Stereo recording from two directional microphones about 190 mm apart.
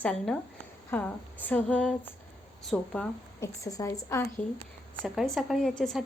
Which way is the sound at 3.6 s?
15° left (ahead or behind).